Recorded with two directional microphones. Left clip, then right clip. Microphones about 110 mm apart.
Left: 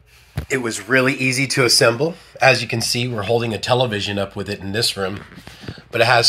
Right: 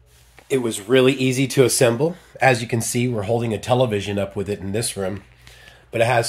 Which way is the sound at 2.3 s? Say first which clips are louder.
Left 4 dB; 45° right (ahead or behind).